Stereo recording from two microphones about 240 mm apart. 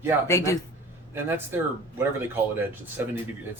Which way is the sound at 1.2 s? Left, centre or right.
Centre.